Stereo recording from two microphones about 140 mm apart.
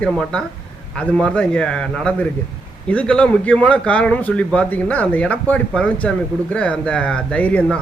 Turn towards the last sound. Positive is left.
turn(degrees=10)  # may be behind; listen again after turning